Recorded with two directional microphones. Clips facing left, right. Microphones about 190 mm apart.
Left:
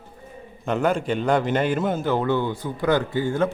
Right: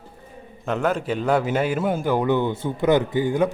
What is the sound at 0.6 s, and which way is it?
A man's voice, centre (ahead or behind).